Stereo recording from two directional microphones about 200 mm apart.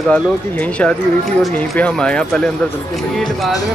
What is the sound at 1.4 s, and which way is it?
Speech, 5° left (ahead or behind).